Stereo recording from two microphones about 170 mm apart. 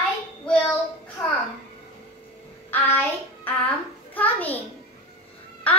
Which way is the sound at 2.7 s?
10° left (ahead or behind).